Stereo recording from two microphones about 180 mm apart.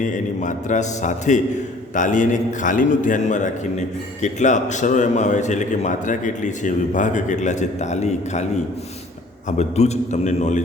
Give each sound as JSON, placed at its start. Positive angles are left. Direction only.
{"t": 0.0, "sound": "a man's voice", "side_deg": 45}